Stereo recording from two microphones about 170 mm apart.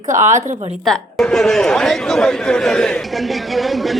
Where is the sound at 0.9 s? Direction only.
Centre (ahead or behind).